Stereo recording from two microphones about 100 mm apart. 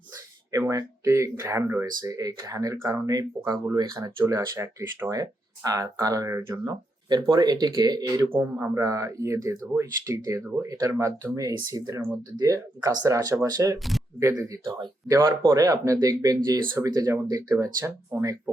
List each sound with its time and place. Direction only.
0.5 s speech: 35° right (ahead or behind)
1.8 s speech: 35° right (ahead or behind)
5.1 s speech: 35° right (ahead or behind)
8.3 s speech: 25° right (ahead or behind)
10.9 s speech: 25° right (ahead or behind)
11.3 s speech: 35° right (ahead or behind)
13.7 s speech: centre (ahead or behind)
14.2 s speech: 30° right (ahead or behind)
15.4 s speech: 35° right (ahead or behind)